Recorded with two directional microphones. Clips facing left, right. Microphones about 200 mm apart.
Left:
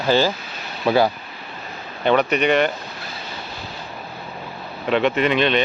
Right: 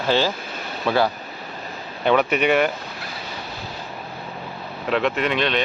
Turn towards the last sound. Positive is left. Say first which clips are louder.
# left 4 dB
turn(degrees=0)  # may be behind; listen again after turning